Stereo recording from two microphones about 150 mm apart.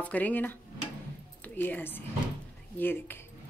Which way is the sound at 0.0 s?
10° left (ahead or behind).